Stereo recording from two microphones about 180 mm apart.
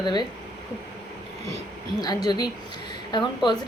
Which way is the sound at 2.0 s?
20° left (ahead or behind).